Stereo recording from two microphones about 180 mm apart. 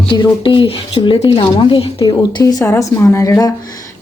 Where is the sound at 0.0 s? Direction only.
25° left (ahead or behind).